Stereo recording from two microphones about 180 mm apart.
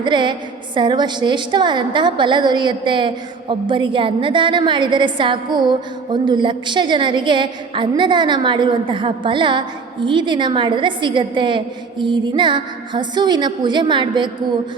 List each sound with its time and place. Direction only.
0.0 s a woman's voice: 25° right (ahead or behind)